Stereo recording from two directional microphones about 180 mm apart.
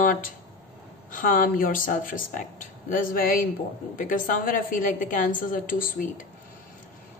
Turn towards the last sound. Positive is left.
turn(degrees=50)  # may be behind; listen again after turning